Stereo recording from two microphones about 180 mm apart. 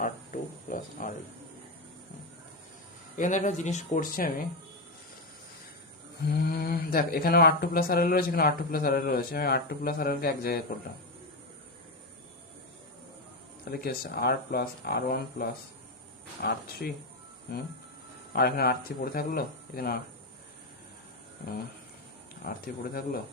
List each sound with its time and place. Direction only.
0.7 s a sound: 50° left (ahead or behind)
3.2 s speech: 45° left (ahead or behind)
6.2 s speech: 60° left (ahead or behind)
13.7 s speech: 60° left (ahead or behind)
22.4 s speech: 55° left (ahead or behind)